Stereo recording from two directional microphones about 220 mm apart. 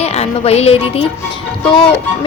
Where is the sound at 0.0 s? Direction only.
30° left (ahead or behind).